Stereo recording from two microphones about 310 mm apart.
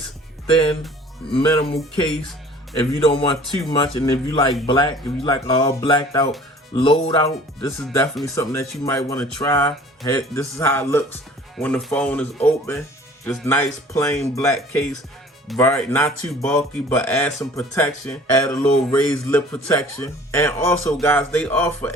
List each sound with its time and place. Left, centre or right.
0.5 s speech: centre
3.0 s speech: centre
7.8 s speech: centre